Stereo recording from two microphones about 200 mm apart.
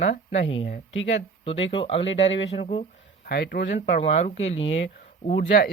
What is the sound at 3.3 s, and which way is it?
Speech, 55° left (ahead or behind).